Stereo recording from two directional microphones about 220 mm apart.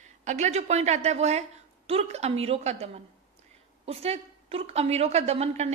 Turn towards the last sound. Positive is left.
turn(degrees=-30)  # may be behind; listen again after turning